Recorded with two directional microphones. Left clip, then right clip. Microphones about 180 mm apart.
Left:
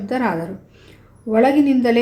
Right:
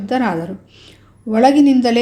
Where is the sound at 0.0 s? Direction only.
30° right (ahead or behind).